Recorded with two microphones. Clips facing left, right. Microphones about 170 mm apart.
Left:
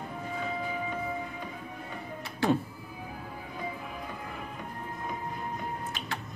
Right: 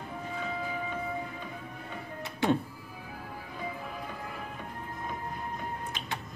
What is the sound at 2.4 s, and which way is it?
Speech, 20° right (ahead or behind).